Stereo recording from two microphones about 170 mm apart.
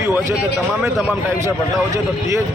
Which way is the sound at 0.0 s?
15° right (ahead or behind).